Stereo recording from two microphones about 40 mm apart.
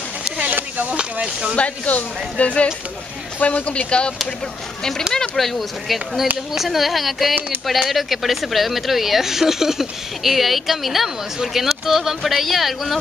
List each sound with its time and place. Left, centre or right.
0.6 s a sound: right
1.6 s speech: left
3.3 s speech: left
5.1 s speech: centre
5.4 s speech: centre